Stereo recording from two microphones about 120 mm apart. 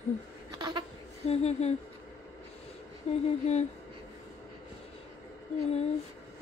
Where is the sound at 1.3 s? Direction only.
65° left (ahead or behind).